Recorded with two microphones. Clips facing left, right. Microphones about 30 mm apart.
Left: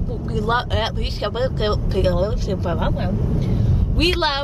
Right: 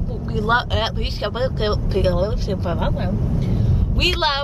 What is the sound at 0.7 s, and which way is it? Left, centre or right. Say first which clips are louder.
Speech: even; centre.